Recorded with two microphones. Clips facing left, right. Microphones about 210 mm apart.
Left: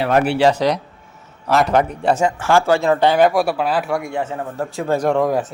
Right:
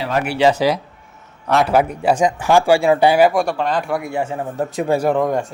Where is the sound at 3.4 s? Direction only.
5° left (ahead or behind).